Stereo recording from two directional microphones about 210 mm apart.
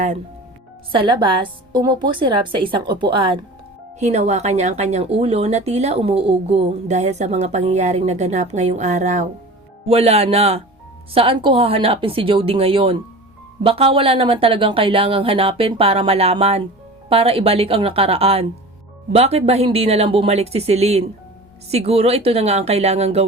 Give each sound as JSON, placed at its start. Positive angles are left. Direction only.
{"t": 0.9, "sound": "a woman's voice", "side_deg": -25}